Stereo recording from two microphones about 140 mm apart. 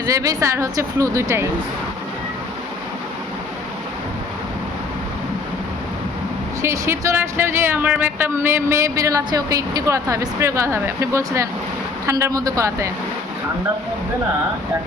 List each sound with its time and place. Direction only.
0.0 s speech: 25° right (ahead or behind)
6.6 s speech: 20° right (ahead or behind)